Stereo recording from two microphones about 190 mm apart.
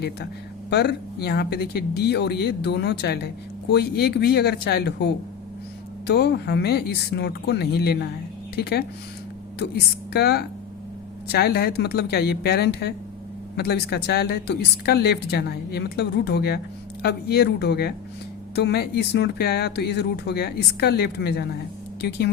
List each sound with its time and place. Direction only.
0.7 s speech: 60° left (ahead or behind)
10.1 s speech: 60° left (ahead or behind)